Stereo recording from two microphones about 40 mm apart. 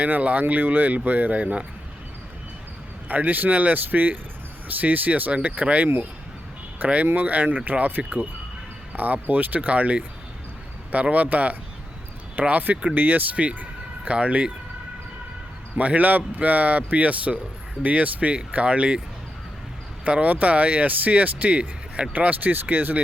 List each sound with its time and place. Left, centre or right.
0.0 s speech: right
3.1 s speech: right
13.3 s speech: right
15.8 s speech: right
20.1 s speech: right